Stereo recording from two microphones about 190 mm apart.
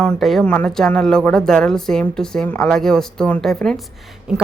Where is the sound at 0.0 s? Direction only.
Centre (ahead or behind).